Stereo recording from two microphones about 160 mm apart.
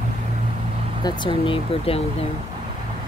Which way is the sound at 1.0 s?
30° left (ahead or behind).